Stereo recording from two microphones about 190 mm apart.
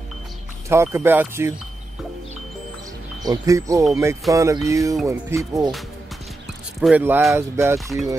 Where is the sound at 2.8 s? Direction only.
20° right (ahead or behind).